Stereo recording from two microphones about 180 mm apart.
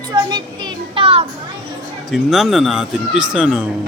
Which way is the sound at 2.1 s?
Centre (ahead or behind).